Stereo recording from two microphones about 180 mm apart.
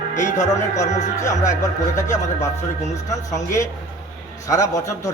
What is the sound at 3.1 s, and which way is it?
Speech, 15° left (ahead or behind).